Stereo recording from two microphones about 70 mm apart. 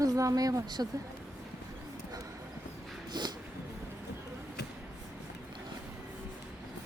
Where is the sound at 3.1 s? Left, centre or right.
Right.